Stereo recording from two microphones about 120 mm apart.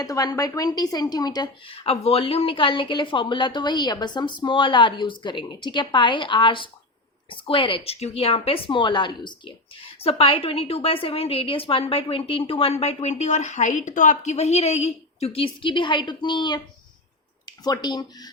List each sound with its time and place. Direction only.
0.0 s a woman's voice: 30° left (ahead or behind)
1.7 s a woman's voice: 50° left (ahead or behind); by 18.3 s 35° left (ahead or behind)